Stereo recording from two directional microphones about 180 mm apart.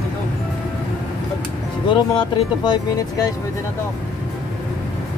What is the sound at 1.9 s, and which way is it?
Speech, 25° left (ahead or behind).